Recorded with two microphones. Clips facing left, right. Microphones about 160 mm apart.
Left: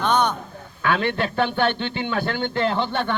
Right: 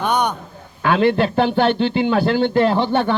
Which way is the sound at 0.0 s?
10° right (ahead or behind).